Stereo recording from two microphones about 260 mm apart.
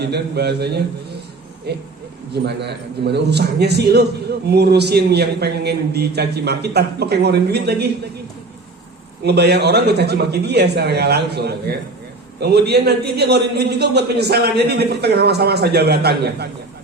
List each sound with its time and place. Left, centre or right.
0.0 s a man's voice: right
9.2 s a man's voice: right